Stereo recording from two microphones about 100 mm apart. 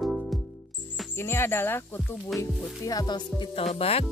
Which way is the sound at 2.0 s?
5° left (ahead or behind).